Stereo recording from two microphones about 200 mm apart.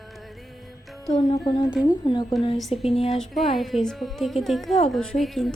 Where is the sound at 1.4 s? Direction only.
20° left (ahead or behind).